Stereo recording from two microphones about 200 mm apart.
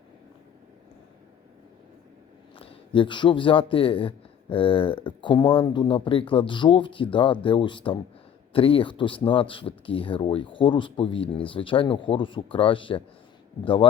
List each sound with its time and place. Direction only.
2.6 s a man's voice: 25° left (ahead or behind)